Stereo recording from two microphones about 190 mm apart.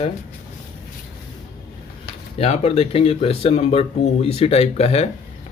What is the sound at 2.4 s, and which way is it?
Speech, 30° left (ahead or behind).